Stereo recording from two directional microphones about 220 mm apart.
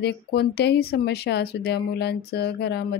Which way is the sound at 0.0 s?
45° left (ahead or behind).